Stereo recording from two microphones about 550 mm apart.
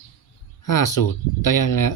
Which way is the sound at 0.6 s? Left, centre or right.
Left.